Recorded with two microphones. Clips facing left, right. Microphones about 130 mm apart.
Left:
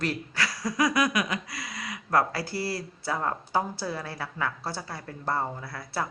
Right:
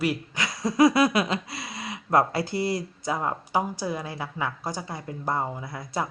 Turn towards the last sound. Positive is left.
turn(degrees=-20)  # may be behind; listen again after turning